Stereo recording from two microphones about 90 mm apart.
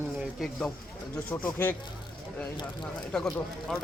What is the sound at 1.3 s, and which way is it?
Speech, 20° left (ahead or behind).